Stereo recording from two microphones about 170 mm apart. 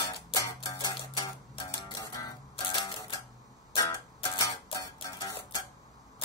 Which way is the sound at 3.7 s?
20° left (ahead or behind).